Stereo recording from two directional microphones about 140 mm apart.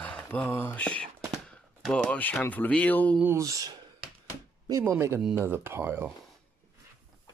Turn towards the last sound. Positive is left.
turn(degrees=-15)  # may be behind; listen again after turning